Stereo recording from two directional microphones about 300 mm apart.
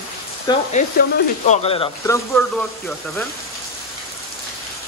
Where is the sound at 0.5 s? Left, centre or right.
Centre.